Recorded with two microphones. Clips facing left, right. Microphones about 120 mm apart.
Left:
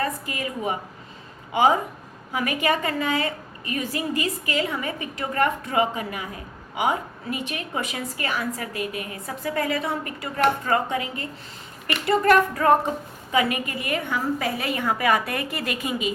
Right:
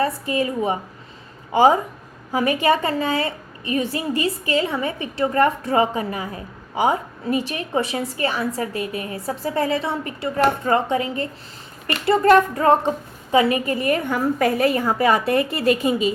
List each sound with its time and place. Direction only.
0.0 s a woman's voice: 30° right (ahead or behind)